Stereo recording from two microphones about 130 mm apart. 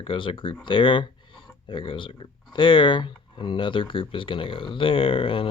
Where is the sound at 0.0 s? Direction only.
40° left (ahead or behind).